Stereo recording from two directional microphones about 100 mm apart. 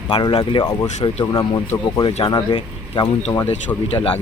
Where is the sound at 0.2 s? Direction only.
60° left (ahead or behind).